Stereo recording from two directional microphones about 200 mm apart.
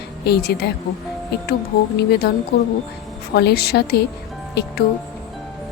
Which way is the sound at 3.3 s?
55° left (ahead or behind).